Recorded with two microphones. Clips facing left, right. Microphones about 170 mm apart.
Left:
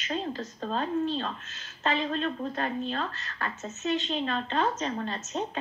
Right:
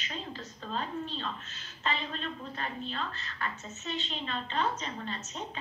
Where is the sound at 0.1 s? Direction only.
40° left (ahead or behind).